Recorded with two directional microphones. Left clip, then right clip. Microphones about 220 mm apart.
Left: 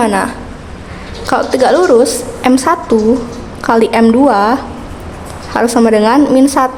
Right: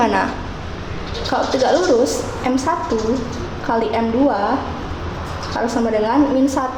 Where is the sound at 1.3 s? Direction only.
35° left (ahead or behind).